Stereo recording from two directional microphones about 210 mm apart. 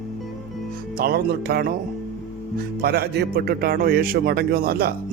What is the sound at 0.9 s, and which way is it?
Speech, 50° right (ahead or behind).